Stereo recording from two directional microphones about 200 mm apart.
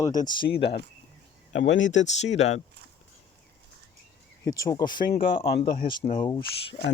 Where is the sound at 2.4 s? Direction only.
35° left (ahead or behind).